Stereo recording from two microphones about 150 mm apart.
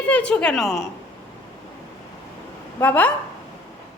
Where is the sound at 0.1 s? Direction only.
10° left (ahead or behind).